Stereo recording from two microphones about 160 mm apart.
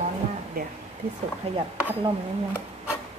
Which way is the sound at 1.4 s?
40° right (ahead or behind).